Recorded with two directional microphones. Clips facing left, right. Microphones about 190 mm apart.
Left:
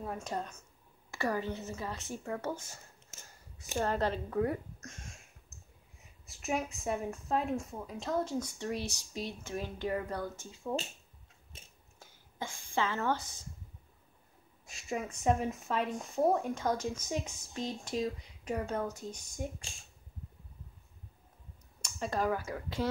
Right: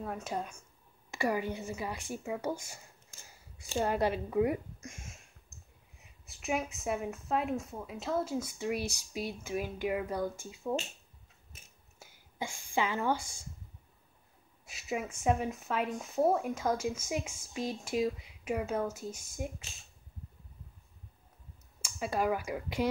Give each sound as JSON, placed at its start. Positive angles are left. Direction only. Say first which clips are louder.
{"t": 0.0, "sound": "speech", "louder": "right 1 dB", "side_deg": 0}
{"t": 3.2, "sound": "a sound", "louder": "left 1 dB", "side_deg": -10}
{"t": 3.7, "sound": "speech", "louder": "right 2 dB", "side_deg": -10}
{"t": 11.5, "sound": "a sound", "louder": "left 3 dB", "side_deg": 30}
{"t": 12.0, "sound": "speech", "louder": "right 2 dB", "side_deg": -10}
{"t": 14.7, "sound": "speech", "louder": "right 1 dB", "side_deg": -5}
{"t": 21.8, "sound": "speech", "louder": "right 1 dB", "side_deg": -10}